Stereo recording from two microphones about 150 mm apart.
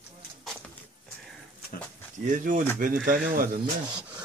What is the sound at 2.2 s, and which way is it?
Speech, 60° right (ahead or behind).